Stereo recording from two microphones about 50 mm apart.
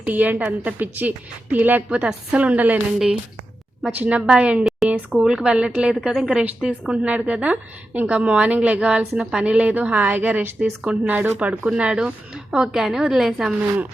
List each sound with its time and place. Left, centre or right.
0.0 s a woman's voice: right
3.9 s a woman's voice: right
4.8 s a sound: centre
5.1 s a woman's voice: centre